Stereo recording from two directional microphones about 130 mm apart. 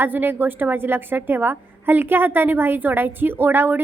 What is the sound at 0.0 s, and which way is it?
A woman's voice, 15° right (ahead or behind).